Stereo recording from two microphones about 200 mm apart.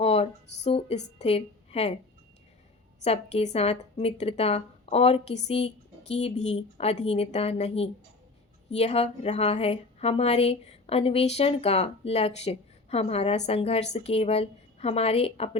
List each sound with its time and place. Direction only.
0.0 s a woman's voice: 30° left (ahead or behind)
3.0 s a woman's voice: 30° left (ahead or behind)